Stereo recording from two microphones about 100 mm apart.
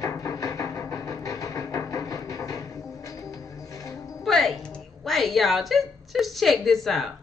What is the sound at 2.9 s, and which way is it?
Music, 35° left (ahead or behind).